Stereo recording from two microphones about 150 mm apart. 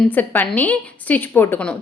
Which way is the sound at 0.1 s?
10° left (ahead or behind).